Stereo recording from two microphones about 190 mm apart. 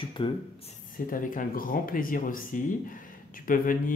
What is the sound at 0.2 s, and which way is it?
Speech, 25° left (ahead or behind).